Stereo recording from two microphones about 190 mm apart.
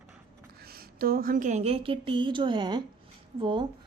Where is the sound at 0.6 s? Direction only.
55° right (ahead or behind); by 3.6 s 25° right (ahead or behind).